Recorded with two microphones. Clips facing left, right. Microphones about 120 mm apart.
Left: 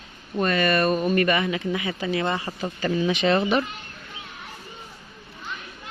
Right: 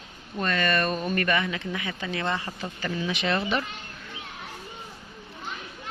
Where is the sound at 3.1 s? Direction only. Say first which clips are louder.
Left 5 dB; 25° left (ahead or behind).